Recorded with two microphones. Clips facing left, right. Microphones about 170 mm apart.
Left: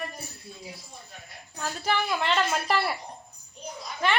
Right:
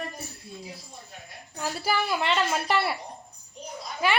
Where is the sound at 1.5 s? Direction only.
10° right (ahead or behind).